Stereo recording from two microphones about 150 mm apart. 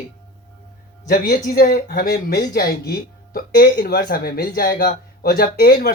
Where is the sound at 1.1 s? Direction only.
65° left (ahead or behind).